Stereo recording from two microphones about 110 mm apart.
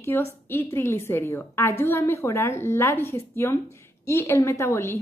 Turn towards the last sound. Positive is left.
turn(degrees=25)  # may be behind; listen again after turning